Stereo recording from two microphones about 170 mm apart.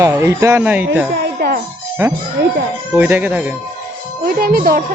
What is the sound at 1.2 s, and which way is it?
Music, 65° right (ahead or behind).